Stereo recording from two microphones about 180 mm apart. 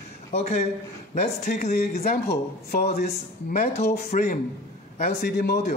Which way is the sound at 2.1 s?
55° left (ahead or behind).